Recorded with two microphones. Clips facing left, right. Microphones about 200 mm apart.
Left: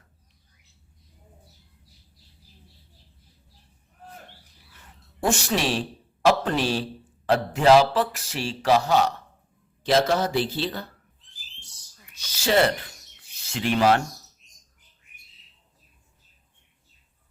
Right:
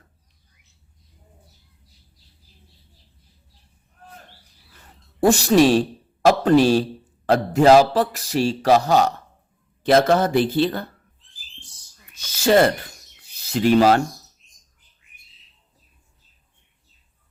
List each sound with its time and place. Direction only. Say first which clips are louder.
5.2 s speech: right 10 dB; 40° right (ahead or behind)
9.8 s speech: right 5 dB; 55° right (ahead or behind)
12.1 s speech: right 5 dB; 50° right (ahead or behind)